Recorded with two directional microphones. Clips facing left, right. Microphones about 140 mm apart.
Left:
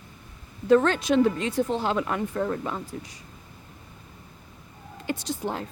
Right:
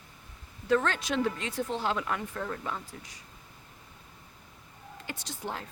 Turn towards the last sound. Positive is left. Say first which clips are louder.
# left 8 dB
turn(degrees=20)  # may be behind; listen again after turning